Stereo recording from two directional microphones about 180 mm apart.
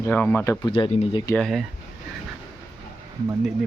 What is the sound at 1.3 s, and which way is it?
Speech, centre (ahead or behind).